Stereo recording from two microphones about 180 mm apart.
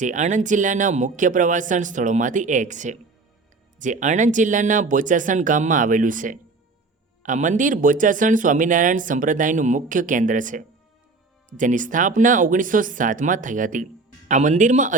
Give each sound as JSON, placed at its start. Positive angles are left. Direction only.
{"t": 0.0, "sound": "speech", "side_deg": -45}